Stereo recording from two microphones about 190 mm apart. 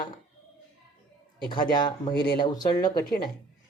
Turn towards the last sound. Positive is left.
turn(degrees=20)  # may be behind; listen again after turning